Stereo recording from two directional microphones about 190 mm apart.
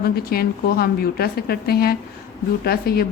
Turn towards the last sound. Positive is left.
turn(degrees=55)  # may be behind; listen again after turning